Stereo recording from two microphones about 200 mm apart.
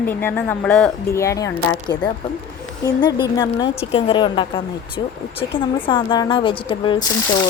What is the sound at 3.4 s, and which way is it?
A woman's voice, 20° left (ahead or behind).